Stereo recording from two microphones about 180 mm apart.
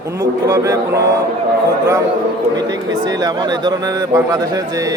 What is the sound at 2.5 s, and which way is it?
A man's voice, 20° right (ahead or behind).